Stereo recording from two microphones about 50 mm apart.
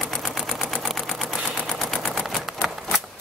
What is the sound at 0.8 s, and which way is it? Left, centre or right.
Machine gun, centre.